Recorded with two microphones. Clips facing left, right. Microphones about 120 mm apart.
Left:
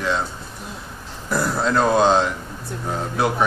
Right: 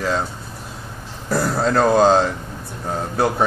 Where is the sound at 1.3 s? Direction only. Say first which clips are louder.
Right 2 dB; 40° right (ahead or behind).